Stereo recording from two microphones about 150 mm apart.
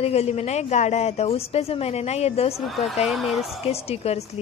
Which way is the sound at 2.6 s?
Centre (ahead or behind).